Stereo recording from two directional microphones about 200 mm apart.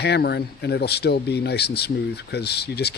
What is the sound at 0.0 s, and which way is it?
Speech, 55° left (ahead or behind).